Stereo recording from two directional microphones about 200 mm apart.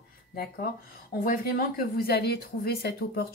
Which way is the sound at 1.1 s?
50° left (ahead or behind).